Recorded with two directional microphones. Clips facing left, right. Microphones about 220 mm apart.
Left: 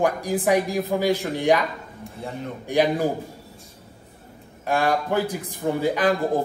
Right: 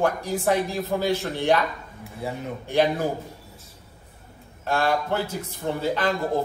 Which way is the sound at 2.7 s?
15° left (ahead or behind).